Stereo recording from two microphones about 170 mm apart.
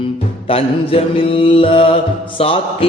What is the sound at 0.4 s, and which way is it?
Mantra, 35° left (ahead or behind).